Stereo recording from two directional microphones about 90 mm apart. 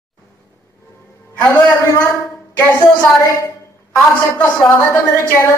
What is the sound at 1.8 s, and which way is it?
Speech, 30° left (ahead or behind).